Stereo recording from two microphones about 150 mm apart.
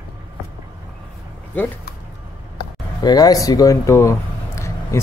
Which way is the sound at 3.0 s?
25° left (ahead or behind).